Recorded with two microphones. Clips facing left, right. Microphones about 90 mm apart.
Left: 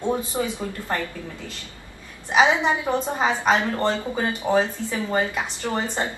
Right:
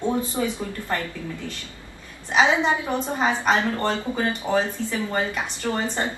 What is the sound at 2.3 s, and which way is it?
A woman's voice, 15° left (ahead or behind).